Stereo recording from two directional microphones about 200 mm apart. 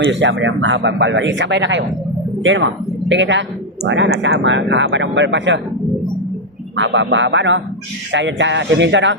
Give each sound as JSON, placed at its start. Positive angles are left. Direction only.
{"t": 0.0, "sound": "speech", "side_deg": -70}
{"t": 6.7, "sound": "speech", "side_deg": -65}